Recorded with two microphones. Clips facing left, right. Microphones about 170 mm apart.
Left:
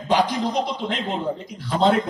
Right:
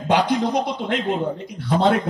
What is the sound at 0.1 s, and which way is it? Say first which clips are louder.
A man's voice: right 2 dB; 60° right (ahead or behind).